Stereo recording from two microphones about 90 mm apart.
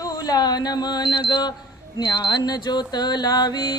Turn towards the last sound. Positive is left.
turn(degrees=50)  # may be behind; listen again after turning